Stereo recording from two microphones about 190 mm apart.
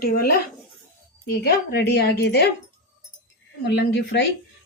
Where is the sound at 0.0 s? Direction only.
50° left (ahead or behind).